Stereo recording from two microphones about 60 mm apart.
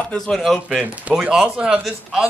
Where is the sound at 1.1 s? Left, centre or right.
Centre.